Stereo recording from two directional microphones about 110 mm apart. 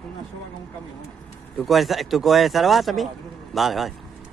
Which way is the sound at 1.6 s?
Centre (ahead or behind).